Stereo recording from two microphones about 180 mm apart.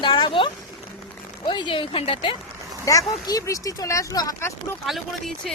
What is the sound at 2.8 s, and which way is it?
Speech, 20° left (ahead or behind).